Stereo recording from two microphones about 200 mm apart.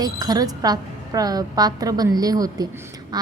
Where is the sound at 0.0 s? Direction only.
20° right (ahead or behind).